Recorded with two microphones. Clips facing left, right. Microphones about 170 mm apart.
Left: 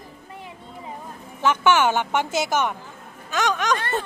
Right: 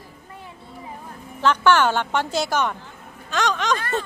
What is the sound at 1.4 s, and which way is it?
A woman's voice, 10° left (ahead or behind).